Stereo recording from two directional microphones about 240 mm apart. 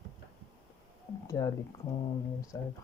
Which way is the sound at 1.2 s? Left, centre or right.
Centre.